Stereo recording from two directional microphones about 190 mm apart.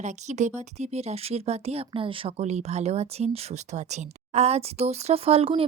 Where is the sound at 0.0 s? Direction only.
40° right (ahead or behind).